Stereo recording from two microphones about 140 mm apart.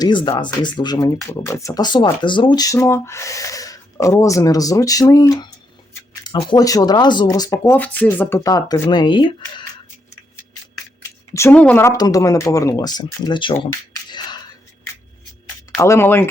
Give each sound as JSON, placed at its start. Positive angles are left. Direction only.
{"t": 0.0, "sound": "speech", "side_deg": 35}
{"t": 6.6, "sound": "speech", "side_deg": 25}
{"t": 8.4, "sound": "speech", "side_deg": 25}
{"t": 11.5, "sound": "speech", "side_deg": 10}
{"t": 11.9, "sound": "speech", "side_deg": 25}
{"t": 13.7, "sound": "a sound", "side_deg": 30}
{"t": 15.7, "sound": "speech", "side_deg": 20}